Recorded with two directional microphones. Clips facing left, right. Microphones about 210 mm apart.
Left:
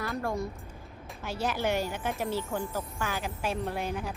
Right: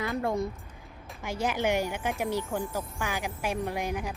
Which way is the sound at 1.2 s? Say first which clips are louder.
Right 2 dB; 15° right (ahead or behind).